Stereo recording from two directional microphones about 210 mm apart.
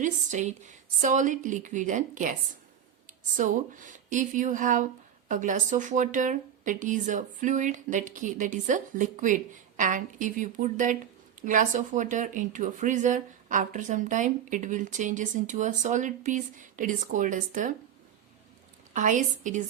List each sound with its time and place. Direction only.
0.0 s a woman's voice: 35° right (ahead or behind)
18.9 s a woman's voice: 35° right (ahead or behind)